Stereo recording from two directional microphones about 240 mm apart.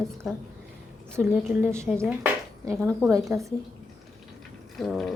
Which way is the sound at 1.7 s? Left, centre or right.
Centre.